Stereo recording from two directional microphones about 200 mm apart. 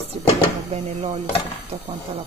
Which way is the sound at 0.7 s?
35° right (ahead or behind).